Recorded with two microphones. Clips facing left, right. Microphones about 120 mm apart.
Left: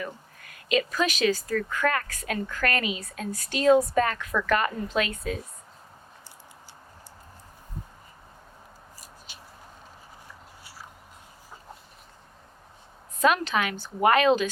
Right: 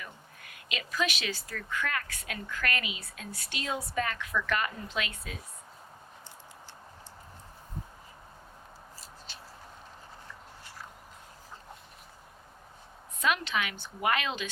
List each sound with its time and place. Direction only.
0.7 s speech: 40° left (ahead or behind)
9.0 s scissors: 10° left (ahead or behind)
10.6 s a sound: 5° left (ahead or behind)
13.1 s a woman's voice: 40° left (ahead or behind)